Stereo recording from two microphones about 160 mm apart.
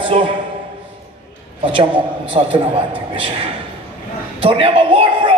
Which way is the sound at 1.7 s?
35° right (ahead or behind).